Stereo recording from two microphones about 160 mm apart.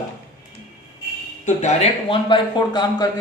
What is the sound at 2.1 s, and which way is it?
Speech, 30° left (ahead or behind).